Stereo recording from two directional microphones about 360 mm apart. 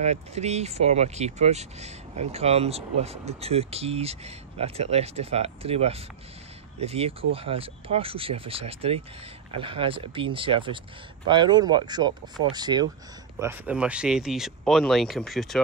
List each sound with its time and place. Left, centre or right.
0.0 s speech: centre